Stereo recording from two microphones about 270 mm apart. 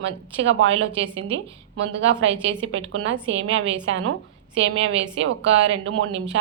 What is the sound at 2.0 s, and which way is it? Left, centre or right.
A woman's voice, right.